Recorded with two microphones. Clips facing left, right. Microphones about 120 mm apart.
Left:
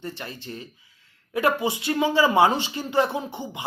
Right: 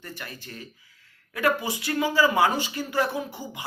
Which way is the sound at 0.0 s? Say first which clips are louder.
Left 5 dB; 25° left (ahead or behind).